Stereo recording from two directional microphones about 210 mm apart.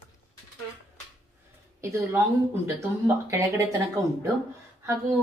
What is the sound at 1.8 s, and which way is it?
A woman's voice, 15° right (ahead or behind).